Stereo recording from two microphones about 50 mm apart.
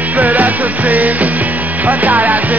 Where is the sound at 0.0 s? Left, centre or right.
Right.